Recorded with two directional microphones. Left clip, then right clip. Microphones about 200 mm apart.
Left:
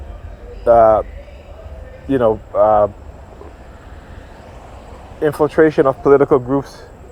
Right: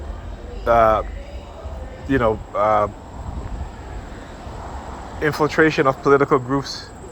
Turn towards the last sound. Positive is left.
turn(degrees=45)  # may be behind; listen again after turning